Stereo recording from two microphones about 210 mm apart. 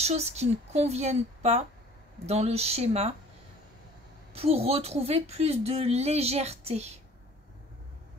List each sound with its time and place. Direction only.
0.0 s a woman's voice: 30° right (ahead or behind)
4.3 s speech: 30° right (ahead or behind)